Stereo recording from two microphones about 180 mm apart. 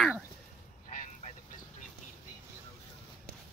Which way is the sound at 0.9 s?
40° left (ahead or behind).